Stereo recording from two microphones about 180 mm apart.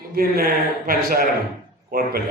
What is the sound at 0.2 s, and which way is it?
A man's voice, 55° right (ahead or behind).